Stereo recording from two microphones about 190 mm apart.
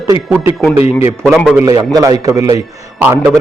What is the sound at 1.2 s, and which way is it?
Speech, centre (ahead or behind).